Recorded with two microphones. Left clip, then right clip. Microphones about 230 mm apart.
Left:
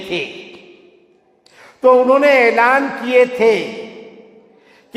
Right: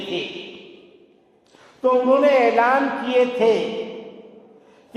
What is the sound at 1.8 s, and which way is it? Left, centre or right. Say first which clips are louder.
A man's voice: left 6 dB; left.